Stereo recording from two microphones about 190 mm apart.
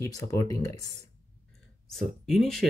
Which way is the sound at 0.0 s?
15° left (ahead or behind).